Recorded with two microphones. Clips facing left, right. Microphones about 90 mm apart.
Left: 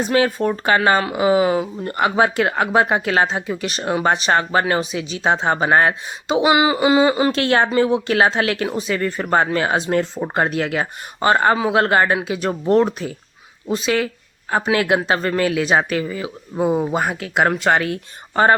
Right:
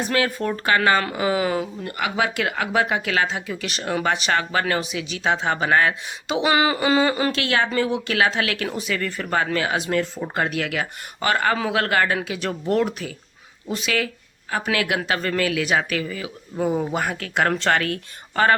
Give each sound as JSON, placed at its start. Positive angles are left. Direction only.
{"t": 0.0, "sound": "speech", "side_deg": 20}
{"t": 1.8, "sound": "speech", "side_deg": 35}
{"t": 7.3, "sound": "speech", "side_deg": 35}
{"t": 7.7, "sound": "speech", "side_deg": 20}